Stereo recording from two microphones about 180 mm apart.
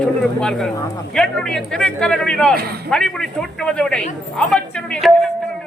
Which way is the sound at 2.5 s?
60° right (ahead or behind).